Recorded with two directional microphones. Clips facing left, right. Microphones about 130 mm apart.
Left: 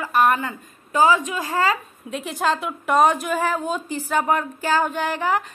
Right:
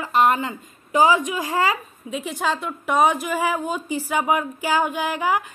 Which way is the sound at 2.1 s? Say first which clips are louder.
Left 2 dB; centre (ahead or behind).